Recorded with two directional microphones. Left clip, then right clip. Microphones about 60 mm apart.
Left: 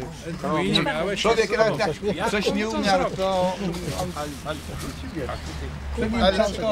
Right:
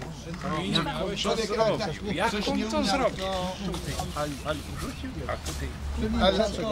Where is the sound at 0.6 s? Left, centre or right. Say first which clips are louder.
Left 6 dB; left.